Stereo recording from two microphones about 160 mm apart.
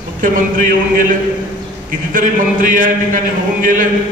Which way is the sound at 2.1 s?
55° right (ahead or behind).